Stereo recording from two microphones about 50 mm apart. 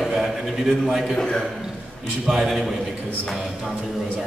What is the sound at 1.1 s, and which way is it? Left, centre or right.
Speech, centre.